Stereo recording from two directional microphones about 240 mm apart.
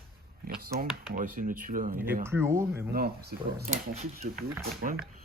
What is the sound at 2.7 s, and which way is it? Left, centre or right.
Speech, right.